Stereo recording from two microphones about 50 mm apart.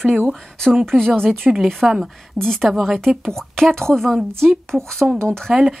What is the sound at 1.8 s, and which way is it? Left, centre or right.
Speech, centre.